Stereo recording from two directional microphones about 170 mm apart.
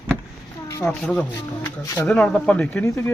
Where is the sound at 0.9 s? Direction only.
5° left (ahead or behind).